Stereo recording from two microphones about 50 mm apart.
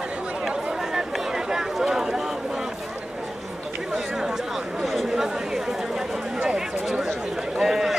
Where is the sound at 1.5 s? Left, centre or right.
Centre.